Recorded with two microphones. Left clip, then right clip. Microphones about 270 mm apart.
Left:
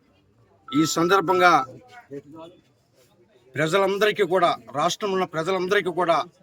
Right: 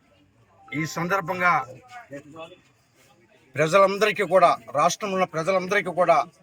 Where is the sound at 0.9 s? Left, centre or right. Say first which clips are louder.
Left 5 dB; left.